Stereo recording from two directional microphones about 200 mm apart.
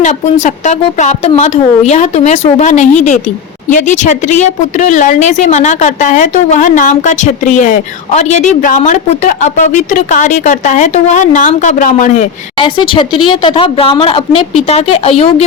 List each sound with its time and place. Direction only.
0.0 s speech: 35° left (ahead or behind)
12.6 s speech: 25° left (ahead or behind)